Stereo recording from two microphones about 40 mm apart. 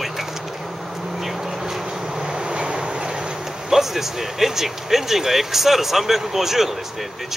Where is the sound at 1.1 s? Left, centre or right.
Centre.